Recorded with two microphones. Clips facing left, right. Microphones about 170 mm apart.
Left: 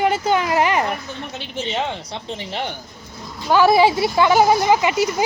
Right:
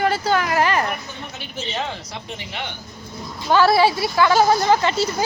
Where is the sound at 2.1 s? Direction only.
30° left (ahead or behind).